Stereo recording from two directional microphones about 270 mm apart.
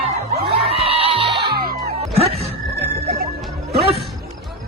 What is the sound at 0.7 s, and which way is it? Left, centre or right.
Music, right.